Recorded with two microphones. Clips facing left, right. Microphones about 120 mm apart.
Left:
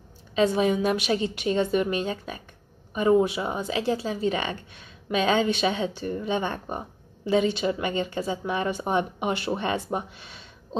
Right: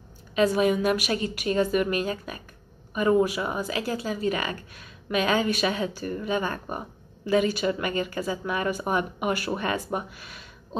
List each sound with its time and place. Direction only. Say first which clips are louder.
0.4 s speech: even; 30° left (ahead or behind)